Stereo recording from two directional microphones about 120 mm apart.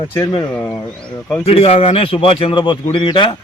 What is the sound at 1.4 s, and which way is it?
A man's voice, 55° left (ahead or behind).